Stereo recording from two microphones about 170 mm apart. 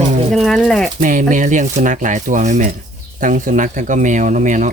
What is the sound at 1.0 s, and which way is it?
Speech, 50° right (ahead or behind).